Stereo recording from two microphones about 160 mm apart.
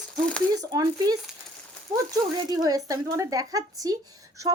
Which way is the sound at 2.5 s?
25° right (ahead or behind).